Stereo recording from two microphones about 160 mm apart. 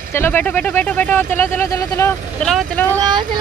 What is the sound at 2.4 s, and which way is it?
Speech, 5° left (ahead or behind).